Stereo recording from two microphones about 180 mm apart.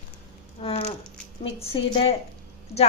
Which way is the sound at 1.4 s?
30° left (ahead or behind).